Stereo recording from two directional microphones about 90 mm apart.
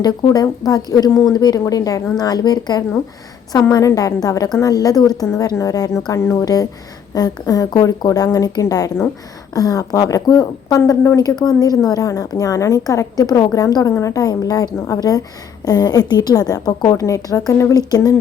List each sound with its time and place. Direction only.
0.0 s a woman's voice: 50° left (ahead or behind)
11.4 s a woman's voice: 45° left (ahead or behind)